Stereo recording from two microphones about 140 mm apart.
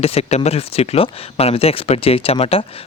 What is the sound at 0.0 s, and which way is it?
Speech, 45° left (ahead or behind).